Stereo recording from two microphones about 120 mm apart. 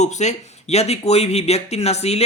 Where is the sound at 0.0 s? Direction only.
75° left (ahead or behind).